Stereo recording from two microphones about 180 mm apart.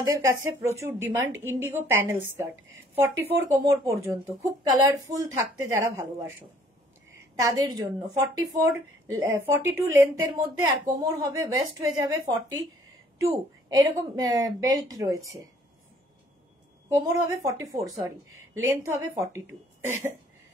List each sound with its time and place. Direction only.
0.0 s a woman's voice: 20° right (ahead or behind)
3.4 s a woman's voice: 15° right (ahead or behind)
13.2 s a woman's voice: 20° right (ahead or behind)
16.9 s a woman's voice: 15° right (ahead or behind)